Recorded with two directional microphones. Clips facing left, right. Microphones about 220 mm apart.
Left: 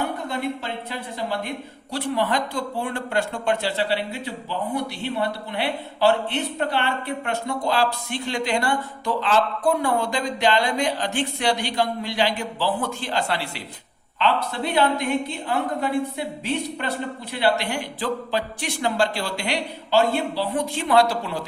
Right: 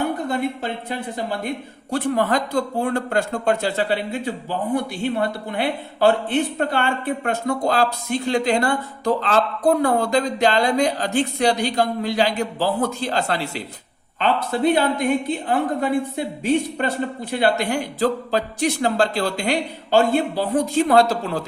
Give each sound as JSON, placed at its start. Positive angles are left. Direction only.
{"t": 0.3, "sound": "a woman's voice", "side_deg": -50}